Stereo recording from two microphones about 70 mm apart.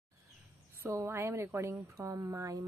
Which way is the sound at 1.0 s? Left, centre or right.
Right.